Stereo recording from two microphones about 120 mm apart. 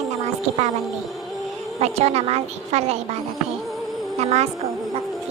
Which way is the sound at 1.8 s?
60° right (ahead or behind).